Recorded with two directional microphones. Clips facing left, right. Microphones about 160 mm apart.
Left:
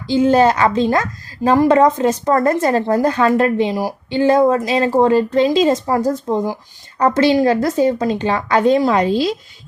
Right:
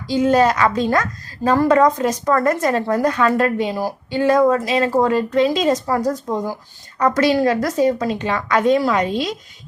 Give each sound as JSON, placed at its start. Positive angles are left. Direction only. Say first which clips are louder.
{"t": 0.1, "sound": "a woman's voice", "louder": "left 3 dB", "side_deg": 30}